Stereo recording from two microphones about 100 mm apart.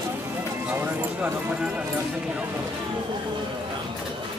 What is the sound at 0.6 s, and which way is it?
Clip-clop, 20° right (ahead or behind).